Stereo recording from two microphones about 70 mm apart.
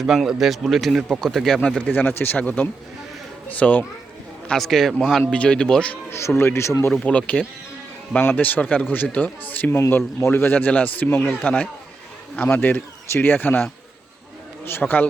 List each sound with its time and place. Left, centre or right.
0.0 s a man's voice: centre
1.6 s speech: centre
1.9 s a man's voice: left
4.4 s a man's voice: centre
6.1 s speech: left
6.9 s a man's voice: centre
12.4 s a man's voice: left